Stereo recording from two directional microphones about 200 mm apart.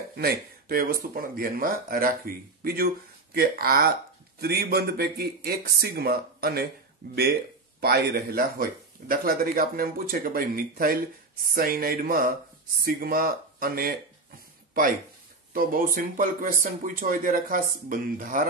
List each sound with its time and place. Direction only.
0.2 s speech: 45° right (ahead or behind)
7.8 s speech: 50° right (ahead or behind)